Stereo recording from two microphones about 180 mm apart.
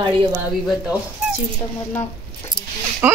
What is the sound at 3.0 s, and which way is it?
Speech, 10° right (ahead or behind).